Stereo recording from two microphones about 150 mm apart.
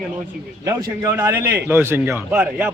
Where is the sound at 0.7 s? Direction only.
20° right (ahead or behind).